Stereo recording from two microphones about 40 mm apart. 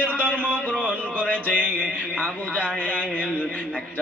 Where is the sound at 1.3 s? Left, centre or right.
Left.